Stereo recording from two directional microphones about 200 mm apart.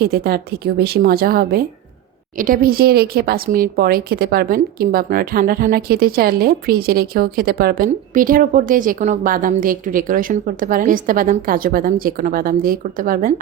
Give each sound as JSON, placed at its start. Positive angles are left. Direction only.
{"t": 0.0, "sound": "speech", "side_deg": -50}